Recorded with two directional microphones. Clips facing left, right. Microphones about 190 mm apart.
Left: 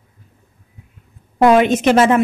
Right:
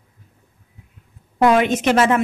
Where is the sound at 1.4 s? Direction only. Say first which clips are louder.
Left 4 dB; 25° left (ahead or behind).